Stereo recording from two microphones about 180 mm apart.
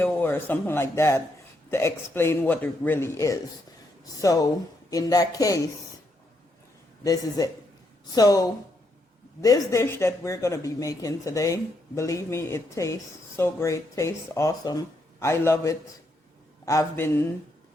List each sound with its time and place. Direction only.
0.0 s speech: 10° left (ahead or behind)
7.0 s speech: 20° left (ahead or behind)